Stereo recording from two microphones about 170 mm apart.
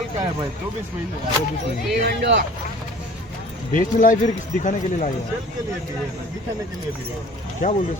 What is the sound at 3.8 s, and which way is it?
Speech, 50° left (ahead or behind).